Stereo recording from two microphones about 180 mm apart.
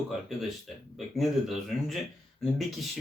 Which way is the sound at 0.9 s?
Centre (ahead or behind).